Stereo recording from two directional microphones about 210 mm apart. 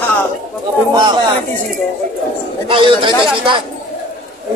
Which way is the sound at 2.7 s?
25° right (ahead or behind).